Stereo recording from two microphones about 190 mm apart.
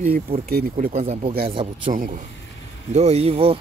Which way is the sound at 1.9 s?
45° right (ahead or behind).